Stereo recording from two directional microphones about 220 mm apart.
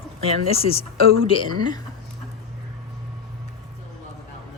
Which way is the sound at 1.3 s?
20° left (ahead or behind).